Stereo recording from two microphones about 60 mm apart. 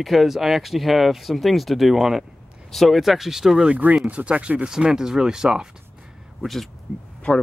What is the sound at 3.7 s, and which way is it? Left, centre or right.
Speech, right.